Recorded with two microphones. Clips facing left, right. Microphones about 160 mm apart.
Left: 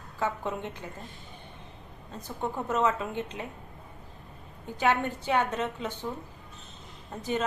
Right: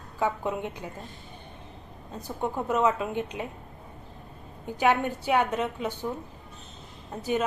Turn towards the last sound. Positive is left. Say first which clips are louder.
# right 3 dB
turn(degrees=-10)  # may be behind; listen again after turning